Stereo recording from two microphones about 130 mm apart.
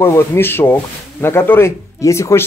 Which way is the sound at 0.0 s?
20° left (ahead or behind).